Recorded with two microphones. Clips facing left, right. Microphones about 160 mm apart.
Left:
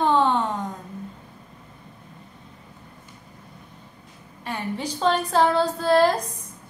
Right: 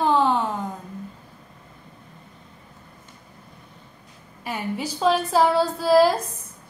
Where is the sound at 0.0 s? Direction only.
Centre (ahead or behind).